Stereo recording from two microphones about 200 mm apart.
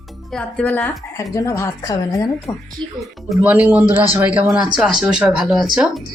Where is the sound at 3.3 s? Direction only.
5° right (ahead or behind).